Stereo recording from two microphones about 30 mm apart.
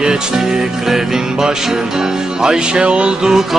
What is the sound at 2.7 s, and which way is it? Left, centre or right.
Music, right.